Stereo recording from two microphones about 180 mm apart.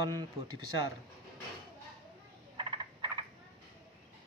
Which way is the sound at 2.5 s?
30° right (ahead or behind).